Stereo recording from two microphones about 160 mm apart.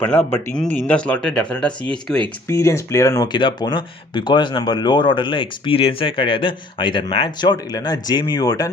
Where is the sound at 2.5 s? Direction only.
20° left (ahead or behind).